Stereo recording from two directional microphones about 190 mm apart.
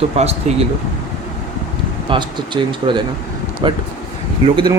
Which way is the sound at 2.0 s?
25° right (ahead or behind).